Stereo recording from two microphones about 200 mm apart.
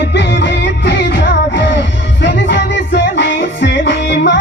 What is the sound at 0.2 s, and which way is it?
Music, 60° left (ahead or behind).